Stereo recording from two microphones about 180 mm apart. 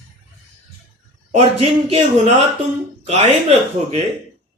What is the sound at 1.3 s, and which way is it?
A man's voice, 35° right (ahead or behind).